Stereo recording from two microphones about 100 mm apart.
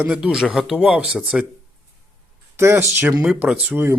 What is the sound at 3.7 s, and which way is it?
Speech, 20° right (ahead or behind).